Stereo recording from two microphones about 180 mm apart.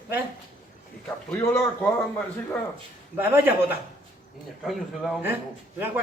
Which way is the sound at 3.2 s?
10° right (ahead or behind).